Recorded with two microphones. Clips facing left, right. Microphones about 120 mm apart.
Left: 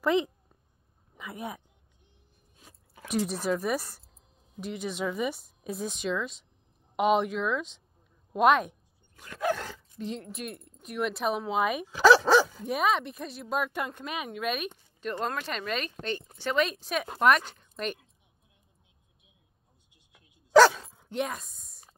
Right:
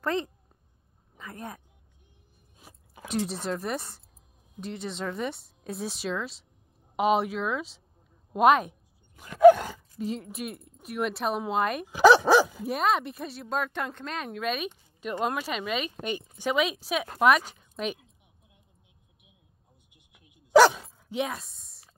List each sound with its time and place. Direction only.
0.0 s a child's voice: 15° left (ahead or behind)
3.1 s a woman's voice: centre (ahead or behind)
9.1 s speech: 15° right (ahead or behind); by 11.8 s centre (ahead or behind)
11.9 s dog: 15° right (ahead or behind)
12.6 s speech: centre (ahead or behind)
19.9 s dog: 15° right (ahead or behind)
21.1 s a sound: centre (ahead or behind)